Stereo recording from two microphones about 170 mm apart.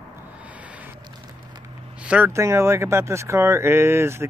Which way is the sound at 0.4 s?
10° right (ahead or behind).